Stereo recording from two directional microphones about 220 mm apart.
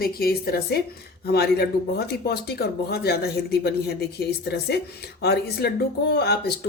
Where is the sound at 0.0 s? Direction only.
45° left (ahead or behind).